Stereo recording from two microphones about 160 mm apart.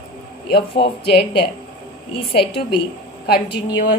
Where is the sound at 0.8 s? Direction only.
90° left.